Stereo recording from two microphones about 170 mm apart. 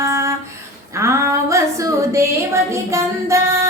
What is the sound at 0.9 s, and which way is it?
Female singing, 15° right (ahead or behind).